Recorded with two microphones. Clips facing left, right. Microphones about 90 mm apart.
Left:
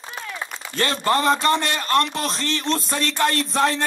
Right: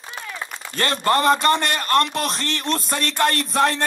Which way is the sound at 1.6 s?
50° right (ahead or behind).